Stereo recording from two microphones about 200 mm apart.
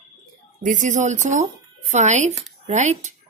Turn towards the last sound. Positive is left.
turn(degrees=-35)  # may be behind; listen again after turning